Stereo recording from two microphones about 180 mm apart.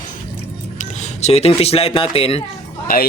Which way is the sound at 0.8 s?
35° left (ahead or behind).